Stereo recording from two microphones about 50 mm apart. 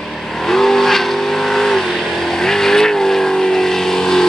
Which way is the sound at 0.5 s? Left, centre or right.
Centre.